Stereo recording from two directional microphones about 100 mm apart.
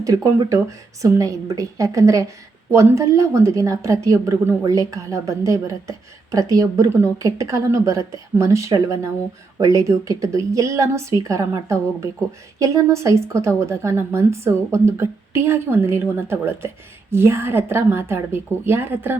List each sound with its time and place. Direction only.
0.0 s a woman's voice: 35° right (ahead or behind)